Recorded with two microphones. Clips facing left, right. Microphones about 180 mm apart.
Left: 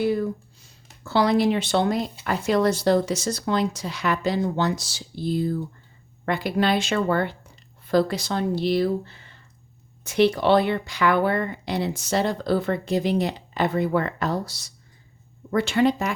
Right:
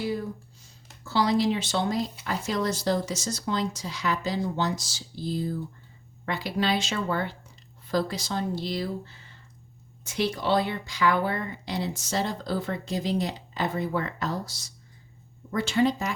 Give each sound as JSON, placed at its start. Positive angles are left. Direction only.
{"t": 1.0, "sound": "speech", "side_deg": 60}
{"t": 10.0, "sound": "speech", "side_deg": 65}